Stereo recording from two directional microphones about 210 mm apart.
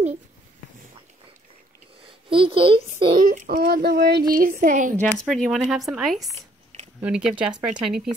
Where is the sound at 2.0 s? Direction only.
25° right (ahead or behind).